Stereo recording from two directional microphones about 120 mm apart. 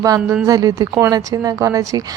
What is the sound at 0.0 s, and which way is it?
A woman's voice, 30° right (ahead or behind).